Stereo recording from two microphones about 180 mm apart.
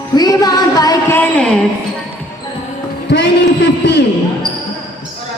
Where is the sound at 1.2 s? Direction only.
5° left (ahead or behind).